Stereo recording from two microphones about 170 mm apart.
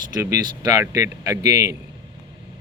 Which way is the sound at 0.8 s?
15° right (ahead or behind).